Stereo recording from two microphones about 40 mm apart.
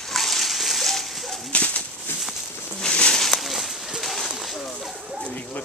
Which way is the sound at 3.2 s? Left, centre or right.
Centre.